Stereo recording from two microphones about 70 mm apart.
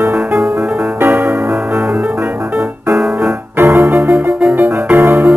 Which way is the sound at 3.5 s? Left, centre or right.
Right.